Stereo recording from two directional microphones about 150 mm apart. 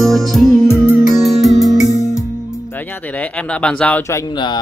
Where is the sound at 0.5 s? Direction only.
15° left (ahead or behind).